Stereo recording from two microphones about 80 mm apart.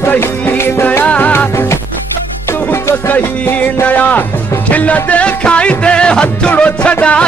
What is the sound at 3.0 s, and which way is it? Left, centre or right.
Music, left.